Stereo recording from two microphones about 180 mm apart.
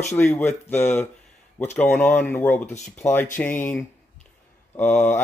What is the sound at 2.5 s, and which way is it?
Speech, 40° left (ahead or behind).